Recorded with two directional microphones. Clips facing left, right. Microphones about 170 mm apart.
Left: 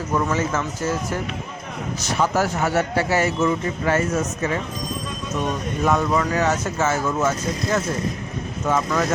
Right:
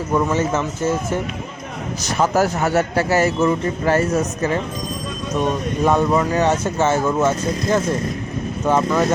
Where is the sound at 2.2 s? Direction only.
40° right (ahead or behind).